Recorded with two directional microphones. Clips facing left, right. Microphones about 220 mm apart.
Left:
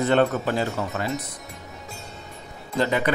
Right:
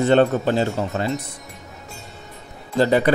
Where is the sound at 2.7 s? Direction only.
35° right (ahead or behind).